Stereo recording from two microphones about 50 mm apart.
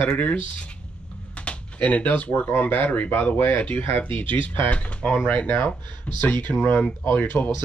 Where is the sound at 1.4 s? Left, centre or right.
Left.